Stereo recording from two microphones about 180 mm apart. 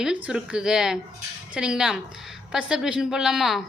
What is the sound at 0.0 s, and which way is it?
A woman's voice, 5° right (ahead or behind).